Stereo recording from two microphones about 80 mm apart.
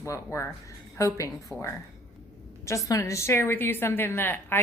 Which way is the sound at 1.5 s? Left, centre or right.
Centre.